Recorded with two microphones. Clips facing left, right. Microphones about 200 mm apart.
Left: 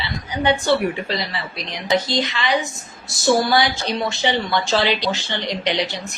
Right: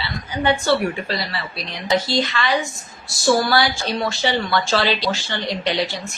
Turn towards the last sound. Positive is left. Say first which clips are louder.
# even
turn(degrees=20)  # may be behind; listen again after turning